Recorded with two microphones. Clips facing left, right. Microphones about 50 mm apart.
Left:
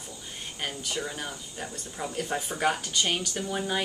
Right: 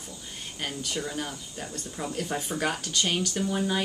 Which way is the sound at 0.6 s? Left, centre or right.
Centre.